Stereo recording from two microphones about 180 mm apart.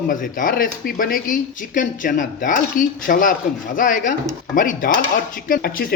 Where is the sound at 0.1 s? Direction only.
50° left (ahead or behind).